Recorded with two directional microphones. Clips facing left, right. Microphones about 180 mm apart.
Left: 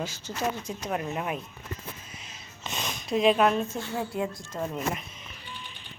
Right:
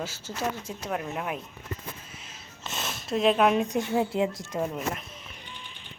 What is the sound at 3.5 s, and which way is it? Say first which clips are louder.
Speech: right 4 dB; 15° right (ahead or behind).